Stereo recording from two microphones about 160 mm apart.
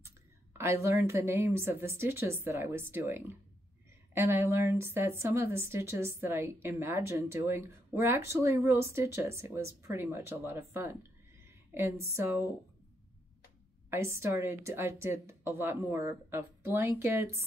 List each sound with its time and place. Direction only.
0.0 s a woman's voice: 15° right (ahead or behind)
13.8 s a woman's voice: 15° right (ahead or behind)